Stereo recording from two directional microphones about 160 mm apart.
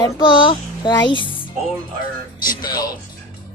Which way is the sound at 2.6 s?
25° left (ahead or behind).